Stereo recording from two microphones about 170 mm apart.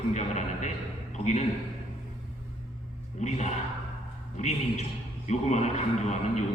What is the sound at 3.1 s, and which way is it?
A man's voice, 45° left (ahead or behind).